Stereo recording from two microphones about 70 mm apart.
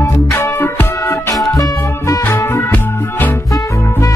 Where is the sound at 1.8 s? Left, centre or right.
Left.